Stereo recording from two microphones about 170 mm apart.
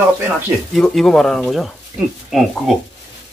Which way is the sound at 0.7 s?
Centre (ahead or behind).